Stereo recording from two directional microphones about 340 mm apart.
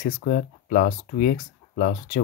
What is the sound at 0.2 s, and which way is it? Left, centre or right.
Speech, left.